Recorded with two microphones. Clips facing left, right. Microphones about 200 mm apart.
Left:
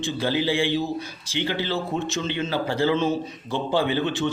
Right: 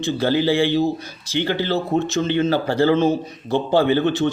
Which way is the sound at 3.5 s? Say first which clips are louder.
Right 6 dB; 55° right (ahead or behind).